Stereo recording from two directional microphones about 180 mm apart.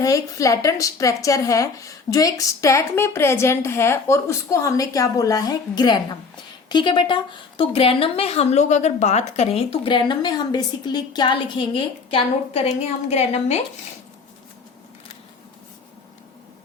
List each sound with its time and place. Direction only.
0.0 s a woman's voice: 20° left (ahead or behind); by 13.6 s 35° left (ahead or behind)